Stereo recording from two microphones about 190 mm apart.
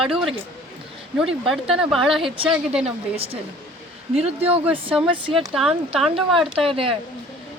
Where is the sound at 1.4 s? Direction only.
Centre (ahead or behind).